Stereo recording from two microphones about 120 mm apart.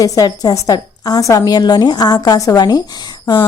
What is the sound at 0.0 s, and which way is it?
A woman's voice, 30° left (ahead or behind).